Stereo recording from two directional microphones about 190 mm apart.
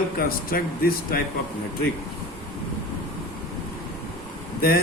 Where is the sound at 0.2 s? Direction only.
50° left (ahead or behind).